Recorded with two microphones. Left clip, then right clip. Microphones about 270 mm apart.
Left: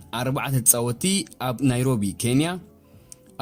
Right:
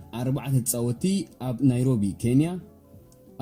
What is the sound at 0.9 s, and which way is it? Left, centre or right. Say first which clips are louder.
Speech: left 4 dB; left.